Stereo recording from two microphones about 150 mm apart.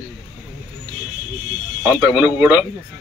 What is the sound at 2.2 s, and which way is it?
Speech, 15° right (ahead or behind).